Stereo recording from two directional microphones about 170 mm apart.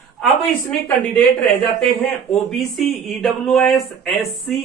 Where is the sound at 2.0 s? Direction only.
Centre (ahead or behind).